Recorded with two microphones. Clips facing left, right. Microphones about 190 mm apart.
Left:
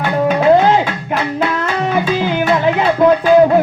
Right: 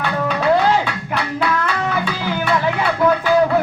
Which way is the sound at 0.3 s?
20° left (ahead or behind).